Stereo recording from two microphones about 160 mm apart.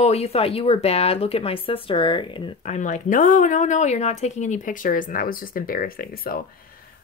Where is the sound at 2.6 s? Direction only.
50° left (ahead or behind).